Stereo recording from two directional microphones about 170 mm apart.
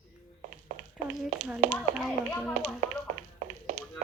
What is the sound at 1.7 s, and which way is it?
Speech, 5° left (ahead or behind).